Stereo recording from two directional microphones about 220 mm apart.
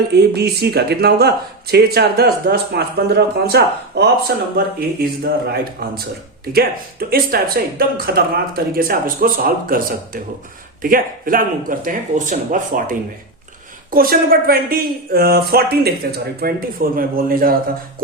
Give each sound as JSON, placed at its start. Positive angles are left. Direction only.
{"t": 0.1, "sound": "speech", "side_deg": -45}